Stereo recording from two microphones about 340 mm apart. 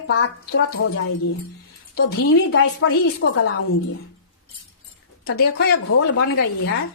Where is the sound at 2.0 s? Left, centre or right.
Left.